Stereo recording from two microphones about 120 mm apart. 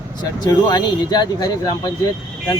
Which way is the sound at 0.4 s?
35° left (ahead or behind).